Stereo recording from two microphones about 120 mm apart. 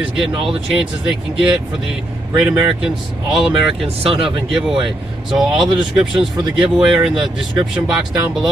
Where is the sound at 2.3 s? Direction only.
5° right (ahead or behind).